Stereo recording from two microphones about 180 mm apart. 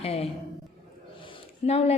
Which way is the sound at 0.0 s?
35° left (ahead or behind).